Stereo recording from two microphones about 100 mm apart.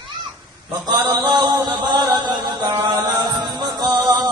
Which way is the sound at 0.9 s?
45° right (ahead or behind).